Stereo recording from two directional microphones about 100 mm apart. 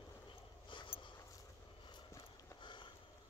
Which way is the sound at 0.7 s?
55° left (ahead or behind).